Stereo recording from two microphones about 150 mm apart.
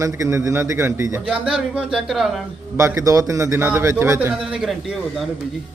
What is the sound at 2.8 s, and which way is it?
A man's voice, 20° right (ahead or behind).